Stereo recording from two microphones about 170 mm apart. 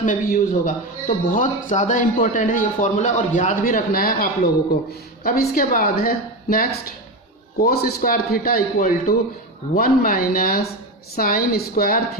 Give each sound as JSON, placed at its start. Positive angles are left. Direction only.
{"t": 0.0, "sound": "a man's voice", "side_deg": 50}